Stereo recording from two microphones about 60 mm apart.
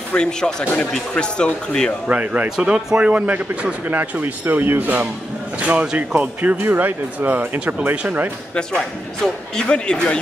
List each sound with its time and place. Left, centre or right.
0.1 s speech: centre
2.0 s a man's voice: right
2.5 s a man's voice: centre
6.5 s a man's voice: right
8.5 s speech: centre